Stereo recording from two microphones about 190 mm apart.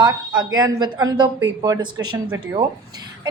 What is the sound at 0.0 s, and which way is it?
A woman's voice, 20° right (ahead or behind).